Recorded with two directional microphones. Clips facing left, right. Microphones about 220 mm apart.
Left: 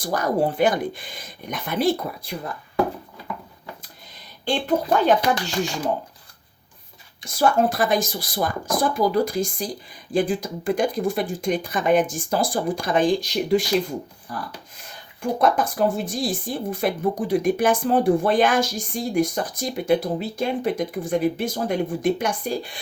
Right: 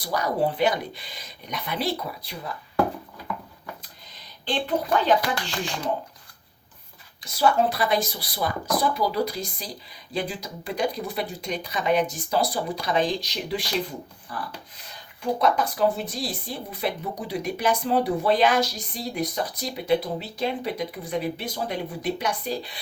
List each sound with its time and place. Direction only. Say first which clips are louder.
0.0 s speech: left 3 dB; 50° left (ahead or behind)
4.4 s speech: left 4 dB; 45° left (ahead or behind)
7.3 s speech: left 2 dB; 50° left (ahead or behind)
15.2 s speech: left 2 dB; 50° left (ahead or behind)